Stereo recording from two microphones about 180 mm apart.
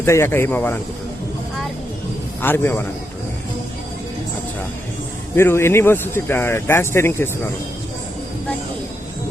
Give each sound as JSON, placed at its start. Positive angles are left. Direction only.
{"t": 0.0, "sound": "speech", "side_deg": 15}
{"t": 2.4, "sound": "speech", "side_deg": 10}
{"t": 5.4, "sound": "speech", "side_deg": 15}